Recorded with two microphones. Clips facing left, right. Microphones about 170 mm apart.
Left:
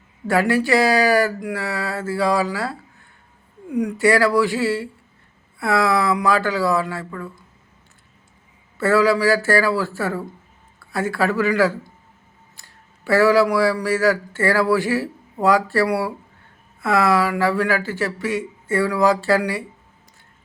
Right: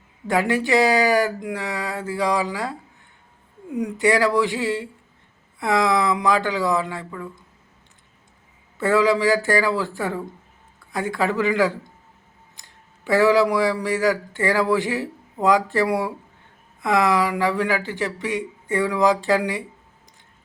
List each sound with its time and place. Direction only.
0.3 s speech: 20° right (ahead or behind)
3.8 s speech: 20° right (ahead or behind)
8.8 s speech: 15° right (ahead or behind)